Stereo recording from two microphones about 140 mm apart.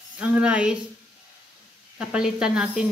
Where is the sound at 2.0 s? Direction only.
5° right (ahead or behind).